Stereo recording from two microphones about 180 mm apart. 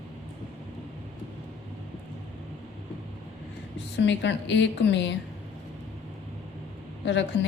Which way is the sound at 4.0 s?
90° left.